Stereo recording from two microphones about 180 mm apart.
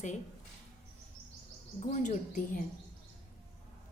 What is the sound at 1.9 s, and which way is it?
Speech, 45° left (ahead or behind).